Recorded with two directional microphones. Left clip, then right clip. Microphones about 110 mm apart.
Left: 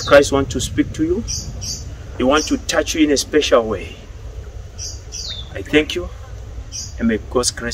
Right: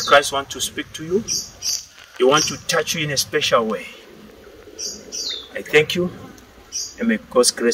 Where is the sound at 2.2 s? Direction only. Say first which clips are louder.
Even; 35° left (ahead or behind).